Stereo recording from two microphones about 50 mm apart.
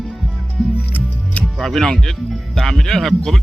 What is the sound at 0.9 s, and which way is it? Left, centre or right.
Music, left.